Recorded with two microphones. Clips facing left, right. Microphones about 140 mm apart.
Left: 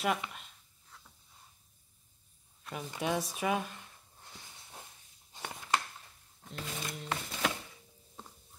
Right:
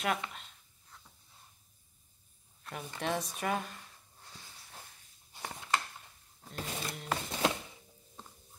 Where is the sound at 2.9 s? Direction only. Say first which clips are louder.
Left 2 dB; 10° left (ahead or behind).